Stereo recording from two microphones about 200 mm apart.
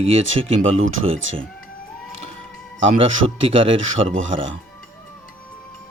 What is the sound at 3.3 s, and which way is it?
Speech, 70° right (ahead or behind).